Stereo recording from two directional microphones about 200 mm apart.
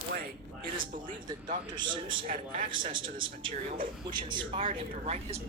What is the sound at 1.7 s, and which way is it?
Speech, 25° right (ahead or behind).